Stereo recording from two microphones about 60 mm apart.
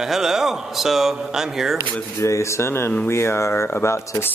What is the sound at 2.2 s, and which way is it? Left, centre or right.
Speech, left.